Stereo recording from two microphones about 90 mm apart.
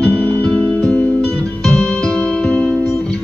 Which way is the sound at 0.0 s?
15° left (ahead or behind).